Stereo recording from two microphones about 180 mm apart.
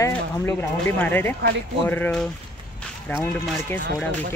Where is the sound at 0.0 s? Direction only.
15° left (ahead or behind).